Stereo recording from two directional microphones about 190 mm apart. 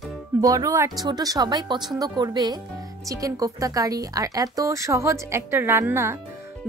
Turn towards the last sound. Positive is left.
turn(degrees=-15)  # may be behind; listen again after turning